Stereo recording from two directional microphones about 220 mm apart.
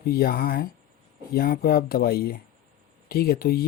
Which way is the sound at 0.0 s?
40° left (ahead or behind).